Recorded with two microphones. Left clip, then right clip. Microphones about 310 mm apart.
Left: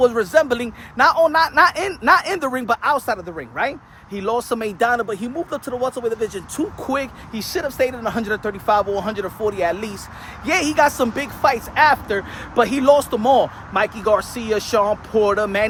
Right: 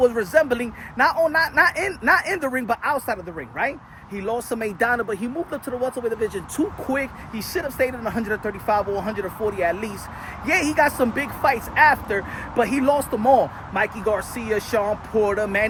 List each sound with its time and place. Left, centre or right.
0.0 s a man's voice: centre